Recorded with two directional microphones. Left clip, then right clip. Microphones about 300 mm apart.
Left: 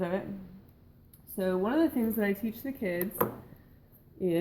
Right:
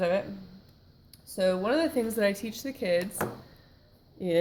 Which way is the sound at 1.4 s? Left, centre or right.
Right.